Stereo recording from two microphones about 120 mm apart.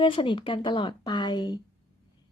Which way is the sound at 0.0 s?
45° left (ahead or behind).